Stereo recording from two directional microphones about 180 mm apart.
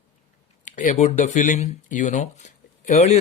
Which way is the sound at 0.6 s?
45° left (ahead or behind).